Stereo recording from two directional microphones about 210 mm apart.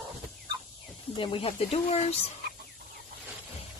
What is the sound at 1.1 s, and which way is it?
Speech, 25° left (ahead or behind).